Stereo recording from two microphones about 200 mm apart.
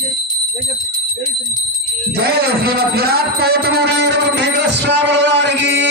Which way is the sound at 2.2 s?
50° right (ahead or behind).